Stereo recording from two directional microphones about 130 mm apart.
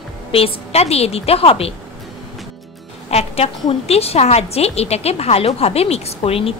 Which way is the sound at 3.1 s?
50° left (ahead or behind).